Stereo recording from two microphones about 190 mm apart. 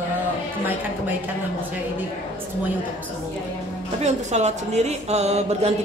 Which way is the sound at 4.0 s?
35° right (ahead or behind).